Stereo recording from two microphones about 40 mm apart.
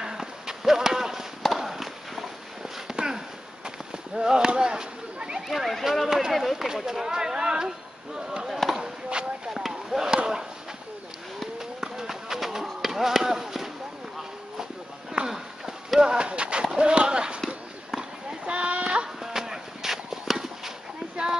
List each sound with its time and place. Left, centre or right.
0.0 s clip-clop: centre
1.6 s a sound: centre
2.9 s sniff: centre
3.6 s horse: centre
4.6 s a sound: centre
5.5 s speech: centre
6.0 s a sound: centre
8.6 s chop: centre
11.8 s run: centre
15.2 s run: centre
16.0 s clip-clop: right
18.4 s sheep: right
19.2 s clip-clop: centre